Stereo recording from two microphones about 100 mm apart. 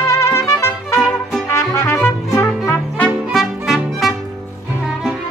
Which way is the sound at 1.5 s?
25° left (ahead or behind).